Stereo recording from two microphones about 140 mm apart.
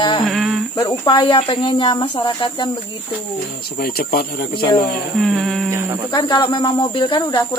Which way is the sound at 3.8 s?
90° left.